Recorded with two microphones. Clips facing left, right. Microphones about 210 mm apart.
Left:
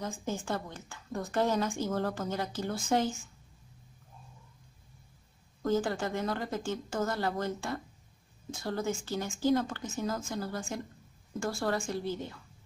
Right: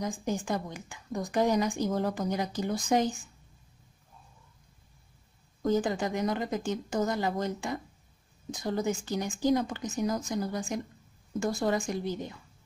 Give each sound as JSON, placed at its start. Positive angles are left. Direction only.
{"t": 0.0, "sound": "a woman's voice", "side_deg": -15}
{"t": 5.6, "sound": "a woman's voice", "side_deg": -15}